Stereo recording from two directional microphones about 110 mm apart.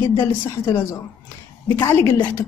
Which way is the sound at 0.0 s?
30° left (ahead or behind).